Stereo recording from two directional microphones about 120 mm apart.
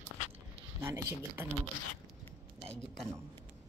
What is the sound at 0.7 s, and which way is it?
Speech, 20° right (ahead or behind).